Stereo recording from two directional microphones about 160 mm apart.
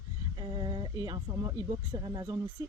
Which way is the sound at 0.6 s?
30° right (ahead or behind).